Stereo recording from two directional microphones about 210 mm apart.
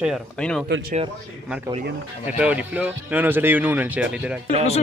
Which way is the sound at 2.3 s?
5° right (ahead or behind).